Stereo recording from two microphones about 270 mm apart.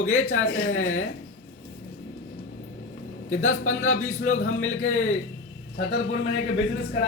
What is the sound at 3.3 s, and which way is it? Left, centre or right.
A man's voice, left.